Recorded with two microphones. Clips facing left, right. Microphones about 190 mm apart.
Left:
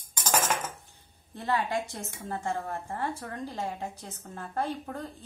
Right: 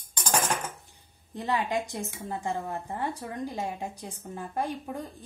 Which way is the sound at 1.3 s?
15° right (ahead or behind).